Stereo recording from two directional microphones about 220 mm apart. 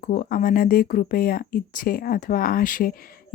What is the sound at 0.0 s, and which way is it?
Speech, 40° left (ahead or behind).